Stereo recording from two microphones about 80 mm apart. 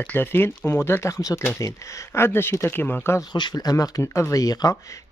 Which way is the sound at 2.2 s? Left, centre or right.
Left.